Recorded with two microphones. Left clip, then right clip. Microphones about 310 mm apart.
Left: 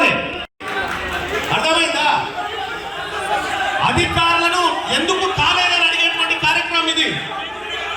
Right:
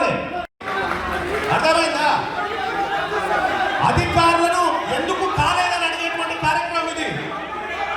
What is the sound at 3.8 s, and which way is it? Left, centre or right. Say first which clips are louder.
Music: even; right.